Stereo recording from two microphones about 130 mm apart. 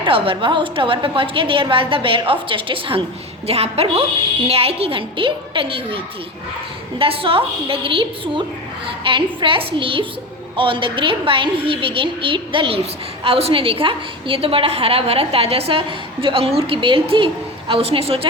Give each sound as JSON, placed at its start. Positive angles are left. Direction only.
{"t": 0.0, "sound": "a woman's voice", "side_deg": -40}
{"t": 7.0, "sound": "a woman's voice", "side_deg": -45}